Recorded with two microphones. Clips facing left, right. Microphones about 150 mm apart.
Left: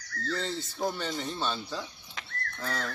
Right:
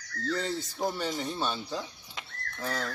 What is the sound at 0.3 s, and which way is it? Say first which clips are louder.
Speech: right 2 dB; 10° right (ahead or behind).